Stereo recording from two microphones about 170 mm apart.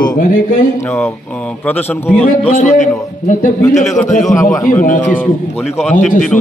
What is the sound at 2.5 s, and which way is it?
A man's voice, 45° left (ahead or behind).